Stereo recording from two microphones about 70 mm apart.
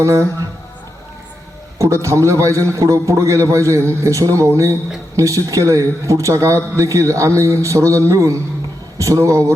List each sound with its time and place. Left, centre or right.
0.0 s a man's voice: right
1.8 s a man's voice: right